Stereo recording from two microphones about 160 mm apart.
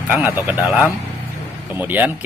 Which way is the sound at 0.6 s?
Centre (ahead or behind).